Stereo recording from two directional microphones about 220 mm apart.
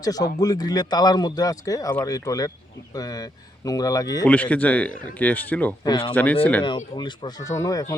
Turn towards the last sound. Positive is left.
turn(degrees=15)  # may be behind; listen again after turning